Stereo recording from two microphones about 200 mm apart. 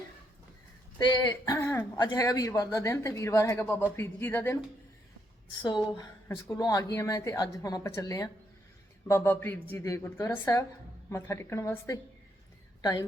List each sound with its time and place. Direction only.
0.9 s a woman's voice: 15° left (ahead or behind)
5.6 s a woman's voice: 20° left (ahead or behind)